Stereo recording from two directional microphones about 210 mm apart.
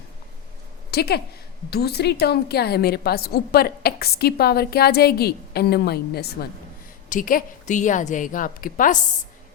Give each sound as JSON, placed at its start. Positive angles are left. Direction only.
{"t": 0.9, "sound": "a woman's voice", "side_deg": 50}